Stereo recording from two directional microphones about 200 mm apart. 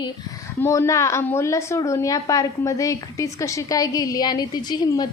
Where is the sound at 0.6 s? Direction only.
15° left (ahead or behind).